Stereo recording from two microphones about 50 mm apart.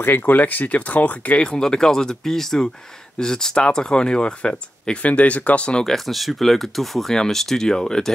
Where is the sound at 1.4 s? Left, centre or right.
Centre.